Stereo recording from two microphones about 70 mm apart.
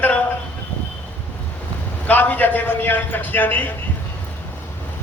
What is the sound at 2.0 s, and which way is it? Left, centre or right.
A man's voice, left.